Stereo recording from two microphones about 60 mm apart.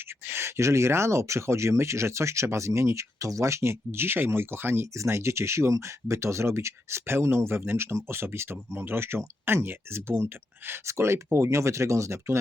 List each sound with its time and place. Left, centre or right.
0.3 s speech: right